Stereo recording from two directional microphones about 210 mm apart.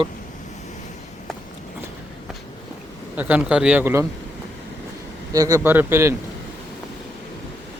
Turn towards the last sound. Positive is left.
turn(degrees=-10)  # may be behind; listen again after turning